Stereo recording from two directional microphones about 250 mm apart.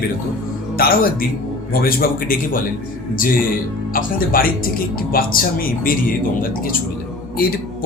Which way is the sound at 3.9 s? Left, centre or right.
Left.